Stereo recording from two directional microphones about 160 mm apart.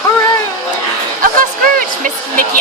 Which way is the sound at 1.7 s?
60° right (ahead or behind).